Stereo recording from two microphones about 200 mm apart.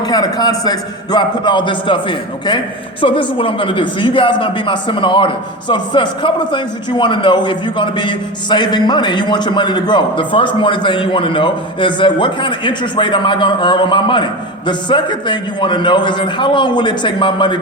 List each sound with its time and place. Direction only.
0.0 s speech: 20° left (ahead or behind)